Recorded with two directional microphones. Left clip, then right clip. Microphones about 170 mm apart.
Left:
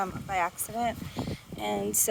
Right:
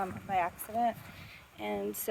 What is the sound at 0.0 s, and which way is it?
Speech, 25° left (ahead or behind).